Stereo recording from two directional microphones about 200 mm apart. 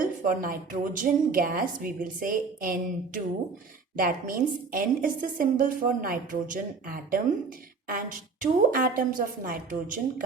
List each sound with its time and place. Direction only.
0.0 s a woman's voice: 45° right (ahead or behind)